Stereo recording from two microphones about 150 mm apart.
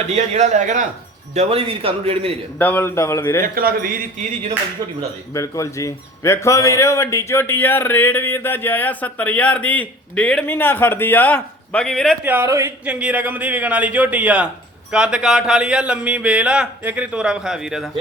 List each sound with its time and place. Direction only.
0.1 s a man's voice: 50° right (ahead or behind)
1.3 s a man's voice: 45° right (ahead or behind)
2.6 s speech: 15° left (ahead or behind)
3.4 s speech: 75° right (ahead or behind)
5.3 s speech: 20° left (ahead or behind); by 12.1 s 5° left (ahead or behind)
12.2 s speech: 15° right (ahead or behind)